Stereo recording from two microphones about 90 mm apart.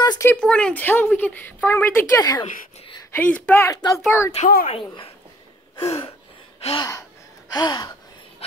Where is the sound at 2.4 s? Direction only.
65° left (ahead or behind).